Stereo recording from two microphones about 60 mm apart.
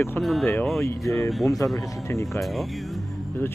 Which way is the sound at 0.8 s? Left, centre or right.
Left.